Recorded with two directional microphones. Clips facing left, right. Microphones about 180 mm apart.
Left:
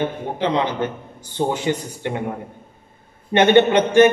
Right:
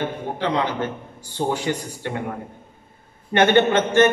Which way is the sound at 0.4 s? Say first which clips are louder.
Left 2 dB; 20° left (ahead or behind).